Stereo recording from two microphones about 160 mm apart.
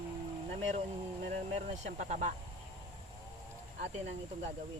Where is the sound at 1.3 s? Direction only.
45° right (ahead or behind).